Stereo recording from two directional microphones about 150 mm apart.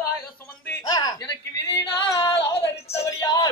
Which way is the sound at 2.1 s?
20° left (ahead or behind).